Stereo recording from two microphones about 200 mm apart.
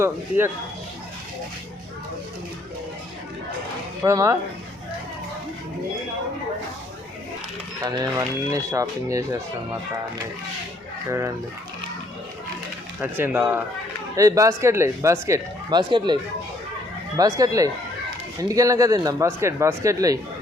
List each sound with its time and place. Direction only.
0.0 s speech: 10° right (ahead or behind)
4.0 s speech: 15° right (ahead or behind)
7.9 s speech: 20° right (ahead or behind)
13.0 s speech: 10° right (ahead or behind)
17.2 s speech: 15° right (ahead or behind)